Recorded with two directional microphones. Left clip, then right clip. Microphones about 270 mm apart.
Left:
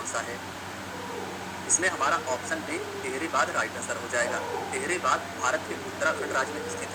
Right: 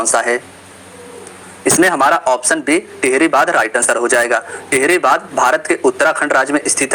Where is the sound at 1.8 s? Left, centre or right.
Right.